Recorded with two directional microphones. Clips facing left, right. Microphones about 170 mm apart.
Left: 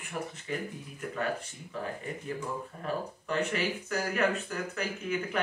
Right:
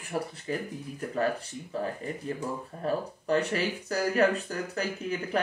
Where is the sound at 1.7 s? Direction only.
35° right (ahead or behind).